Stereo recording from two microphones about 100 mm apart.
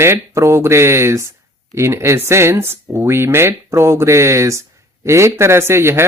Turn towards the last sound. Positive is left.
turn(degrees=-25)  # may be behind; listen again after turning